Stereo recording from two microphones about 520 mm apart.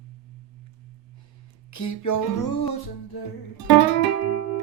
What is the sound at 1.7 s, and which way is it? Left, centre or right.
Speech, left.